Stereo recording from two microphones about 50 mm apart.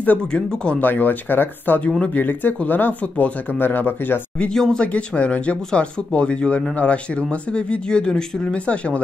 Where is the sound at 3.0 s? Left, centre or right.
Left.